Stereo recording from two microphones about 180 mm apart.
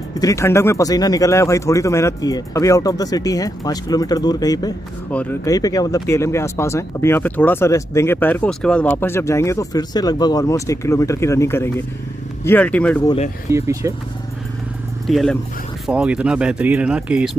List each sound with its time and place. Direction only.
0.2 s speech: 15° left (ahead or behind)
5.1 s speech: 5° left (ahead or behind)
5.4 s speech: 20° left (ahead or behind)
13.5 s speech: 15° right (ahead or behind)
15.0 s speech: centre (ahead or behind)